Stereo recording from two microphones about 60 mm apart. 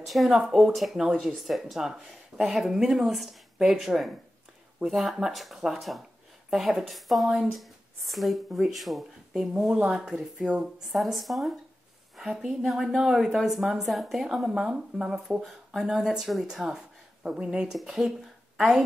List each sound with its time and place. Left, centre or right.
0.0 s a woman's voice: centre
10.9 s a woman's voice: centre